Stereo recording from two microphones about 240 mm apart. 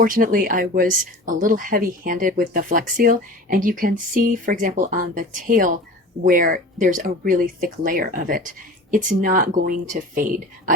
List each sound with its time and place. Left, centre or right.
0.0 s speech: right